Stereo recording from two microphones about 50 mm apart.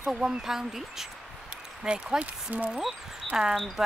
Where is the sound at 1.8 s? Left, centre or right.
Centre.